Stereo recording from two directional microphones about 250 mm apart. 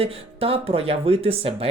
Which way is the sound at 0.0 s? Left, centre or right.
Right.